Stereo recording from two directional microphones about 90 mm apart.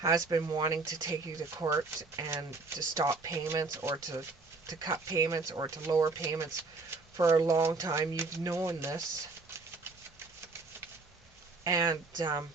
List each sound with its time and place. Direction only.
0.0 s speech: 40° right (ahead or behind)
11.6 s speech: 45° right (ahead or behind)